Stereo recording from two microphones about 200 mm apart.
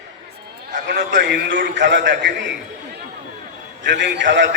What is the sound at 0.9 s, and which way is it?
A man's voice, 60° right (ahead or behind).